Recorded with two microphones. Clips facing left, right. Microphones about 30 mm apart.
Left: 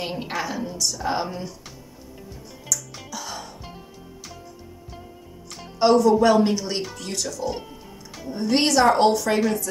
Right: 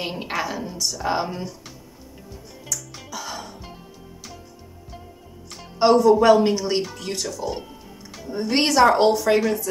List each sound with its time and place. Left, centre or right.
0.0 s a woman's voice: centre
2.7 s music: centre
5.8 s a woman's voice: centre
7.0 s speech: centre
7.3 s a woman's voice: centre